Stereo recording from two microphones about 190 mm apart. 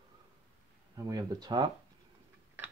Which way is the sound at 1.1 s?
20° right (ahead or behind).